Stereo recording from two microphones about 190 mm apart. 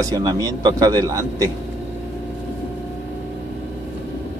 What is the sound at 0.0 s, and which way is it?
A man's voice, 20° right (ahead or behind).